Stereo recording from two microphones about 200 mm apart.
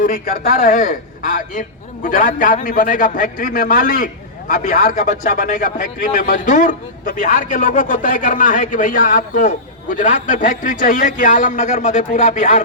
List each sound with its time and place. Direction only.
0.0 s a man's voice: 45° left (ahead or behind)